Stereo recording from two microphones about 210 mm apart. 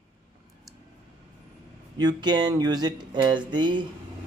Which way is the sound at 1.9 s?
20° right (ahead or behind).